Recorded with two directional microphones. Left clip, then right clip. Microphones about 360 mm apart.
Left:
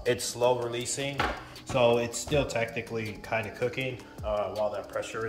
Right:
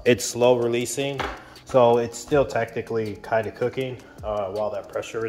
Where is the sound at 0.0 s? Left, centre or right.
Right.